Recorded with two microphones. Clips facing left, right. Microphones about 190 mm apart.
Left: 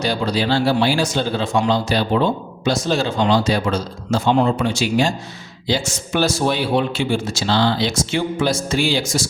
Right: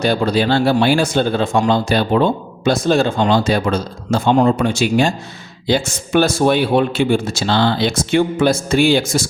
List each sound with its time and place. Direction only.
0.0 s speech: 55° right (ahead or behind)